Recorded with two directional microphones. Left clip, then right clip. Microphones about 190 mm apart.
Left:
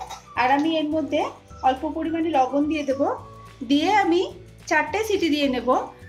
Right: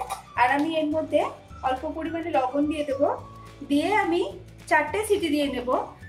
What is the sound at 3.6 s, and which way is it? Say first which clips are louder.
A woman's voice: left 4 dB; 45° left (ahead or behind).